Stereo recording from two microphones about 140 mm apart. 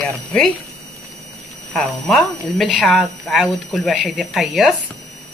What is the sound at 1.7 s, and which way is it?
Speech, centre (ahead or behind).